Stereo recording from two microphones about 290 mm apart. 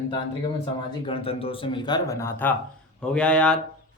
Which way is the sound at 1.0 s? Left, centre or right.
Centre.